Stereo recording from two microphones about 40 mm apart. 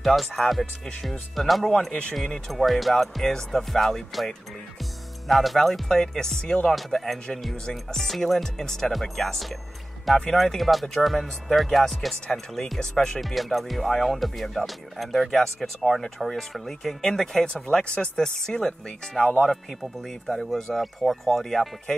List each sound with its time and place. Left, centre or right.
0.0 s speech: centre
2.5 s speech: centre
5.3 s speech: centre
6.4 s speech: left
6.9 s speech: centre
13.2 s speech: centre